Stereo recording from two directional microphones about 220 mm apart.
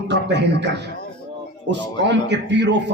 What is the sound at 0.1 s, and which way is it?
A man's voice, 50° right (ahead or behind).